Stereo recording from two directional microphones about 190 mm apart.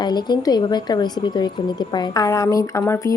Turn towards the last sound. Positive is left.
turn(degrees=15)  # may be behind; listen again after turning